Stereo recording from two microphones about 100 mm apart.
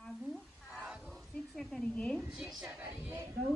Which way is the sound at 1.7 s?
10° left (ahead or behind).